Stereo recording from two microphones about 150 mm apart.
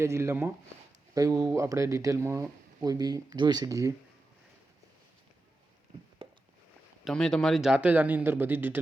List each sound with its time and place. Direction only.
0.0 s a man's voice: 20° right (ahead or behind)
6.2 s a sound: 35° right (ahead or behind)
7.0 s a man's voice: 5° left (ahead or behind); by 8.8 s 15° right (ahead or behind)